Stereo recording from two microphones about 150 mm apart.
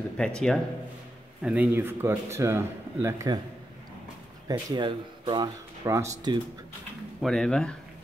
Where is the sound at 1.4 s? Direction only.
10° right (ahead or behind).